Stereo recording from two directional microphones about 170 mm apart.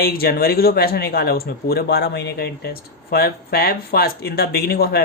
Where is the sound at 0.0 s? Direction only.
65° left (ahead or behind).